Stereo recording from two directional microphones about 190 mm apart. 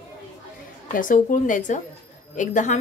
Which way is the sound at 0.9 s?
45° left (ahead or behind).